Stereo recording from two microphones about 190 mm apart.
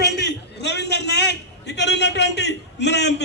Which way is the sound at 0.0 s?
65° left (ahead or behind).